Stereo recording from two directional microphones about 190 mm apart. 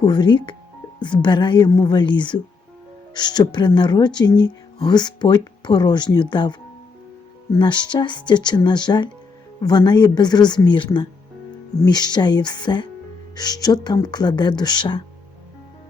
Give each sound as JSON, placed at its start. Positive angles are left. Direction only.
{"t": 0.0, "sound": "speech", "side_deg": 25}